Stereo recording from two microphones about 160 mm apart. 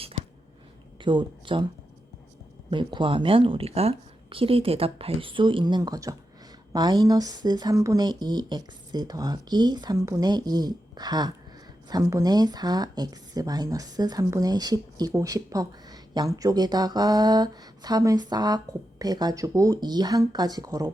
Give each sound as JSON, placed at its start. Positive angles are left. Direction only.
{"t": 1.0, "sound": "speech", "side_deg": -30}
{"t": 2.6, "sound": "a woman's voice", "side_deg": -30}